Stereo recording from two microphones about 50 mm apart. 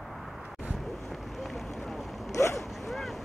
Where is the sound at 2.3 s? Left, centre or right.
Left.